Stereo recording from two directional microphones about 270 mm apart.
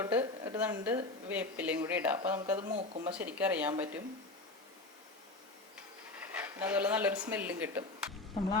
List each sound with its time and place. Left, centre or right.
0.0 s a woman's voice: centre
2.6 s speech: right
3.2 s speech: centre
6.1 s speech: centre